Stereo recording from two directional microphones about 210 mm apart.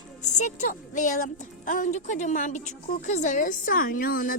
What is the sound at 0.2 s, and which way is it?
Speech, 35° left (ahead or behind).